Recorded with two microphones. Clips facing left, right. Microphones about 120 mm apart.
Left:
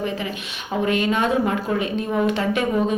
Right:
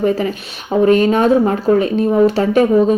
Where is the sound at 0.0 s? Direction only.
40° right (ahead or behind).